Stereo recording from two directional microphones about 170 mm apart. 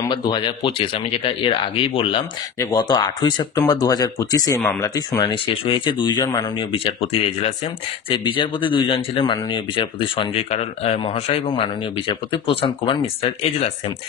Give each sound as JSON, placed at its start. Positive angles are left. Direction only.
{"t": 0.1, "sound": "speech", "side_deg": 30}
{"t": 4.6, "sound": "speech", "side_deg": 5}
{"t": 4.8, "sound": "speech", "side_deg": 20}